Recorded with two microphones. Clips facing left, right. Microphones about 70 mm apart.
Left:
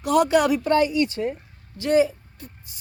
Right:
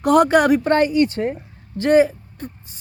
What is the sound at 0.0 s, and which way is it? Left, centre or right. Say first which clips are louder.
Speech: right 4 dB; right.